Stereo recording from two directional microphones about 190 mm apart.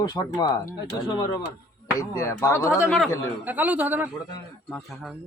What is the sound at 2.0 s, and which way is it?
Speech, 20° left (ahead or behind).